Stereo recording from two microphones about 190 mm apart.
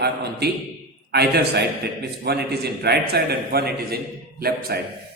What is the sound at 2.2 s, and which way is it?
A man's voice, 60° right (ahead or behind).